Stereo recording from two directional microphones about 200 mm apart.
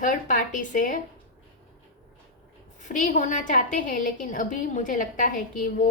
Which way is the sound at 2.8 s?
40° left (ahead or behind).